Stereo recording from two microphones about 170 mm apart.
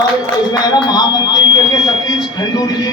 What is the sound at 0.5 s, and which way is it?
Speech, 25° left (ahead or behind).